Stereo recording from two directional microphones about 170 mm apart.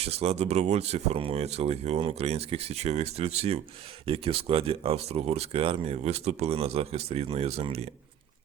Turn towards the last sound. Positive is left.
turn(degrees=-35)  # may be behind; listen again after turning